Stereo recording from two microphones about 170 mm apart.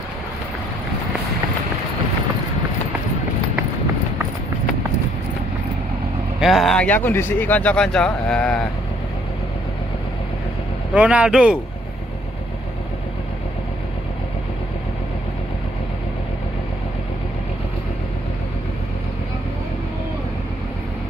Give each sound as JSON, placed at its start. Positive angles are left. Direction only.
{"t": 6.4, "sound": "speech", "side_deg": 0}
{"t": 10.9, "sound": "speech", "side_deg": -10}